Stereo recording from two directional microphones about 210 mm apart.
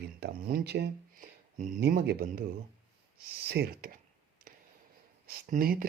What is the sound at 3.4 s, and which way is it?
Speech, 50° right (ahead or behind).